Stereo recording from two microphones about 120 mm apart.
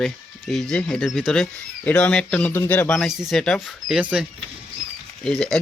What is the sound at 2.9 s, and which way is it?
Speech, centre (ahead or behind).